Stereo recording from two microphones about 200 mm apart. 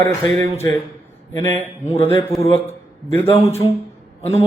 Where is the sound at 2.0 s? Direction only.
10° left (ahead or behind).